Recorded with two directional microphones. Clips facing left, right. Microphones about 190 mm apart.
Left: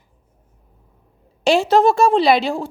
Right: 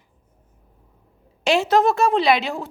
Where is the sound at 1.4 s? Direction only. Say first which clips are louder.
Left 3 dB; 30° left (ahead or behind).